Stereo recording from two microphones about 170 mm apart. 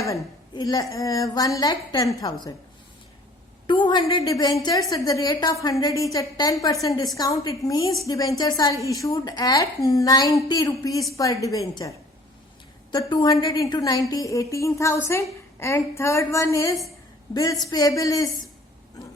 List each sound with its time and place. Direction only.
0.0 s a woman's voice: 20° left (ahead or behind)
3.7 s a woman's voice: 25° left (ahead or behind)